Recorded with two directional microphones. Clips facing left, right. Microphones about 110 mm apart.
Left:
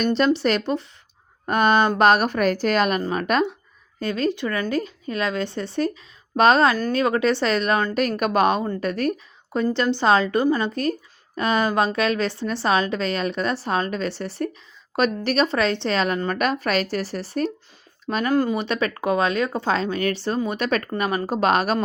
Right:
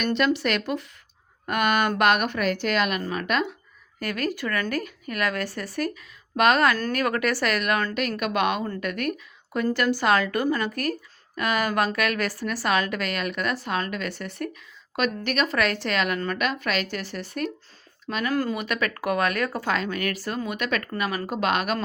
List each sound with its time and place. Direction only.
0.0 s a woman's voice: 30° left (ahead or behind)
4.0 s speech: 25° left (ahead or behind)
7.9 s a woman's voice: 40° left (ahead or behind)